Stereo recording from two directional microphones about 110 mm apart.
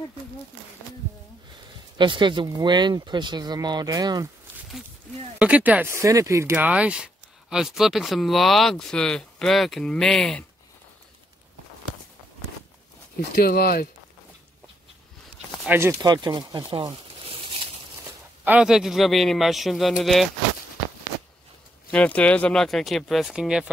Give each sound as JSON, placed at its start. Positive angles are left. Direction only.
{"t": 2.0, "sound": "speech", "side_deg": -45}
{"t": 5.4, "sound": "speech", "side_deg": -10}
{"t": 6.5, "sound": "speech", "side_deg": -10}
{"t": 15.7, "sound": "speech", "side_deg": -20}
{"t": 16.0, "sound": "speech", "side_deg": -40}
{"t": 17.3, "sound": "a sound", "side_deg": -60}
{"t": 18.4, "sound": "speech", "side_deg": -10}
{"t": 21.9, "sound": "speech", "side_deg": 10}